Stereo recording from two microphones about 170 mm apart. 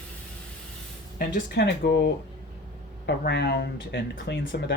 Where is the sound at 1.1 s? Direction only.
70° left (ahead or behind); by 4.7 s 90° left.